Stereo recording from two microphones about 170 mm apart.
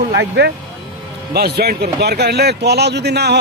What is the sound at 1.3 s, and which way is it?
Speech, 70° right (ahead or behind).